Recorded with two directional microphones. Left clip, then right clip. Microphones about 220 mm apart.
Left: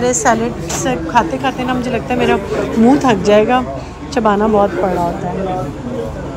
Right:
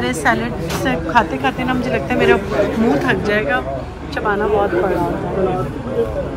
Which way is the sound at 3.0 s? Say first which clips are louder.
Left 6 dB; 20° left (ahead or behind).